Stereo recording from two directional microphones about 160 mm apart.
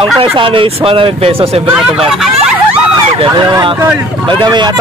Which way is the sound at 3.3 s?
25° right (ahead or behind).